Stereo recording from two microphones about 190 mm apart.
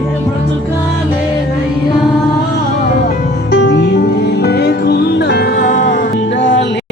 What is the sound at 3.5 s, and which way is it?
Music, 65° left (ahead or behind).